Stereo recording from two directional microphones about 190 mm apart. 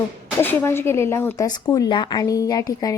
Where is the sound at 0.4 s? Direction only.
10° left (ahead or behind).